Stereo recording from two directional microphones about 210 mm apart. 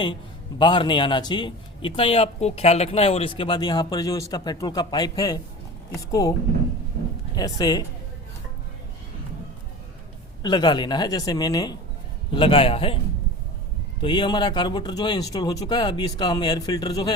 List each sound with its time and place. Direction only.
0.6 s speech: 25° left (ahead or behind)
7.3 s speech: 20° left (ahead or behind)
10.4 s speech: 20° left (ahead or behind)
14.0 s speech: 20° left (ahead or behind)